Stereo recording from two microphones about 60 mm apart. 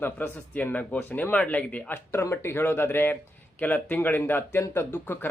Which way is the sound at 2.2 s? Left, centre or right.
Left.